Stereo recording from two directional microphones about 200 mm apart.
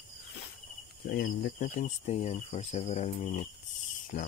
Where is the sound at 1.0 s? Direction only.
50° left (ahead or behind).